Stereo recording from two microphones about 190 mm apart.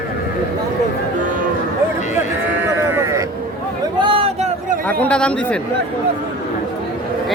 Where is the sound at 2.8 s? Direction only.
15° right (ahead or behind).